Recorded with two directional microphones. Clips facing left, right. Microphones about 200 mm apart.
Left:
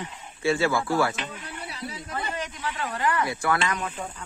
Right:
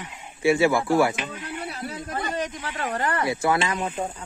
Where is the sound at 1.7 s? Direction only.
50° right (ahead or behind).